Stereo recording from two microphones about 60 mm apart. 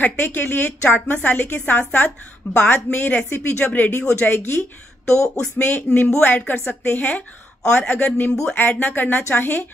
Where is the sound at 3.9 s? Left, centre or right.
Left.